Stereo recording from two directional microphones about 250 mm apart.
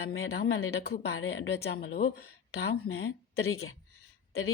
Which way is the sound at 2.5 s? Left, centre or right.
Left.